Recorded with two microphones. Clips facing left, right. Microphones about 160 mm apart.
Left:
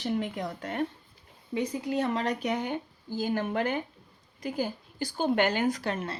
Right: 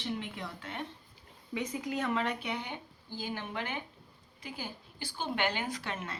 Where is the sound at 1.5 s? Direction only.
35° left (ahead or behind).